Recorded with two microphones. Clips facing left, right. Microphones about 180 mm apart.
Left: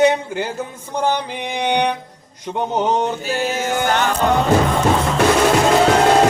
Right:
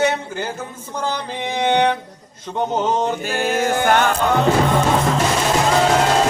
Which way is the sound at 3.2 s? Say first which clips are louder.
Right 1 dB; 55° right (ahead or behind).